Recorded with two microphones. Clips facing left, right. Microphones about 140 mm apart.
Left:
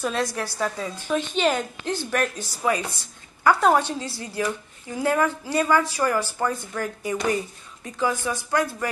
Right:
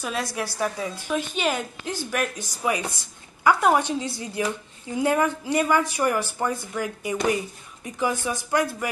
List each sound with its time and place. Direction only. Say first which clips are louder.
0.0 s a woman's voice: left 3 dB; 10° right (ahead or behind)